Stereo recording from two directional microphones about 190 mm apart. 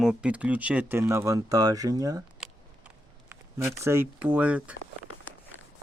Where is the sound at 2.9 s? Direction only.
10° right (ahead or behind).